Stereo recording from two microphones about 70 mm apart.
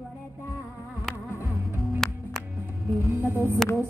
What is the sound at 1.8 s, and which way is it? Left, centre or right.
Music, centre.